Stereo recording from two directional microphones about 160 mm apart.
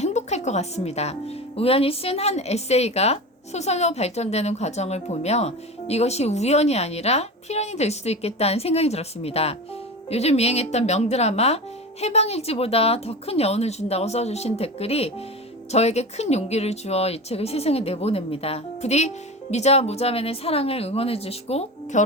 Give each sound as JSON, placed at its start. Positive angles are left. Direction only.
{"t": 0.0, "sound": "a woman's voice", "side_deg": 45}